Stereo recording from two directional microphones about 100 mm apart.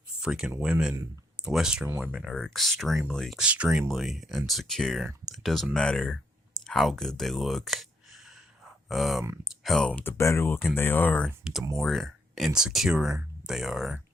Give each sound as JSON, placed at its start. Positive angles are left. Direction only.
{"t": 0.2, "sound": "speech", "side_deg": -5}
{"t": 2.1, "sound": "speech", "side_deg": 5}
{"t": 3.3, "sound": "speech", "side_deg": -10}
{"t": 9.9, "sound": "speech", "side_deg": 20}
{"t": 11.8, "sound": "speech", "side_deg": 0}